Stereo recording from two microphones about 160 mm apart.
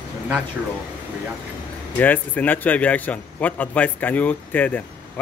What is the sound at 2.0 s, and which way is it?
A man's voice, 10° left (ahead or behind).